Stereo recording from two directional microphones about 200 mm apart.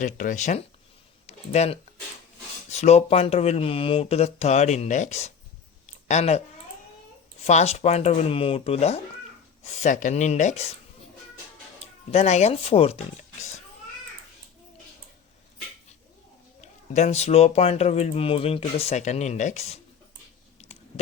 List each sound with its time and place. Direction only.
0.0 s speech: 40° left (ahead or behind)
5.8 s a sound: 35° left (ahead or behind)
7.4 s speech: 30° left (ahead or behind)
11.8 s speech: 35° left (ahead or behind)
16.6 s speech: 35° left (ahead or behind)
20.6 s a sound: 35° left (ahead or behind)